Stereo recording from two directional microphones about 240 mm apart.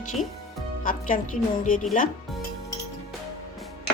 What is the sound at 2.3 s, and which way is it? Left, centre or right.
Music, centre.